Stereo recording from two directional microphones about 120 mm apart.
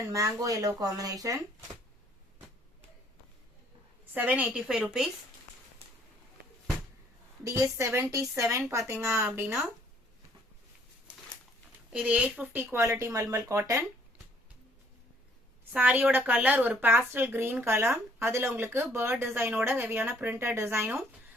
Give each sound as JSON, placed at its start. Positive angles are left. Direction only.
{"t": 0.0, "sound": "speech", "side_deg": -30}
{"t": 4.1, "sound": "a woman's voice", "side_deg": -15}
{"t": 7.8, "sound": "speech", "side_deg": -20}
{"t": 11.9, "sound": "speech", "side_deg": -10}
{"t": 15.7, "sound": "a woman's voice", "side_deg": -10}